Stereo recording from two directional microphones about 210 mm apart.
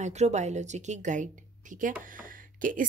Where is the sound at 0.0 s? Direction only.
35° right (ahead or behind).